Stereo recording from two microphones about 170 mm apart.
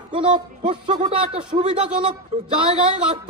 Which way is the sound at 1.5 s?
40° right (ahead or behind).